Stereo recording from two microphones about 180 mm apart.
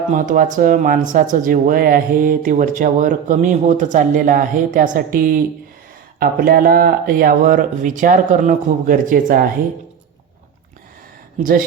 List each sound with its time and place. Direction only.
0.1 s speech: 45° right (ahead or behind)